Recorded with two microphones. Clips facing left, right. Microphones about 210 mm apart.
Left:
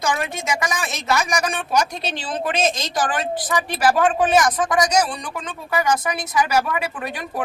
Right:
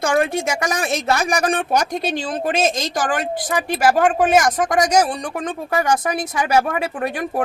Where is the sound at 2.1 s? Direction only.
45° right (ahead or behind).